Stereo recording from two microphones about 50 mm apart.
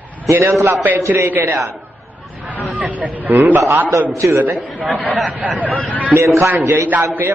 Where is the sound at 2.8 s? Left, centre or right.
Right.